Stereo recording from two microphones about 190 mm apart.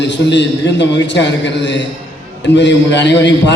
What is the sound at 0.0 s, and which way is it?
A man's voice, 65° left (ahead or behind).